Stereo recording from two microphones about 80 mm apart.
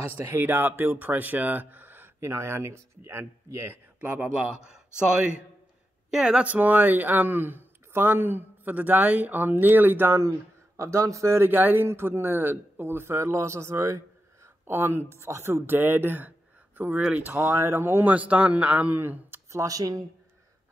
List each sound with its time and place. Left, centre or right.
0.4 s speech: right; by 6.5 s centre
6.5 s speech: right
10.8 s a man's voice: right
19.6 s speech: right